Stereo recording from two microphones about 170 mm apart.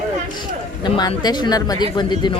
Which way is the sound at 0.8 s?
25° left (ahead or behind).